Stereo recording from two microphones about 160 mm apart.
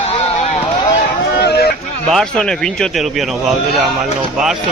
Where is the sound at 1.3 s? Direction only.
85° left.